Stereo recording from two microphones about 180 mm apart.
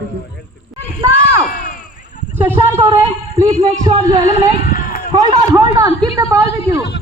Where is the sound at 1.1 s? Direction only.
55° left (ahead or behind).